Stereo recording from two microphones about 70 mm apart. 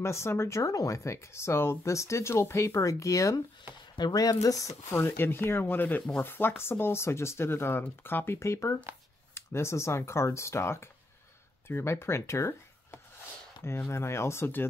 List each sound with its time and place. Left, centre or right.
0.0 s speech: left
4.0 s speech: left
8.4 s speech: left